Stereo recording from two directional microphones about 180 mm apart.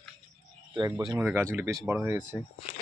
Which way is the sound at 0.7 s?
20° right (ahead or behind).